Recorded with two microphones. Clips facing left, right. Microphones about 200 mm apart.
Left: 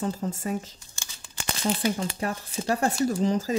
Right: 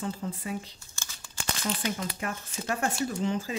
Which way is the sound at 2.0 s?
30° left (ahead or behind).